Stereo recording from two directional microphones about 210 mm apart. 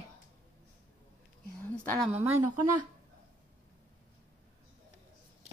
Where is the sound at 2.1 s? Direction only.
10° right (ahead or behind).